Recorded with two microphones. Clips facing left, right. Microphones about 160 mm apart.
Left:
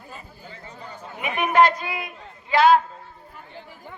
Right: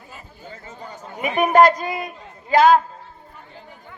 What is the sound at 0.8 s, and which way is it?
Chatter, 45° right (ahead or behind).